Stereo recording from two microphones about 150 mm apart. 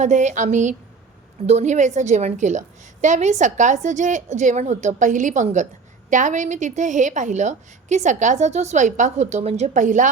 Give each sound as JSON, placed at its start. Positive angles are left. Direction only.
{"t": 0.0, "sound": "a woman's voice", "side_deg": -55}